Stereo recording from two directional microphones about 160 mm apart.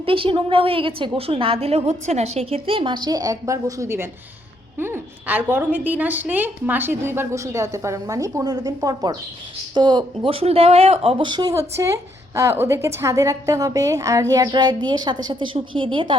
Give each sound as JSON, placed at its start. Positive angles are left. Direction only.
{"t": 0.0, "sound": "a woman's voice", "side_deg": -35}